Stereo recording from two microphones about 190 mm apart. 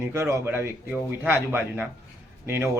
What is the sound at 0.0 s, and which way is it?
Speech, 15° right (ahead or behind).